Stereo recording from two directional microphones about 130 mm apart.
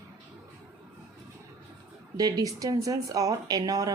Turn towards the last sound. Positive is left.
turn(degrees=-30)  # may be behind; listen again after turning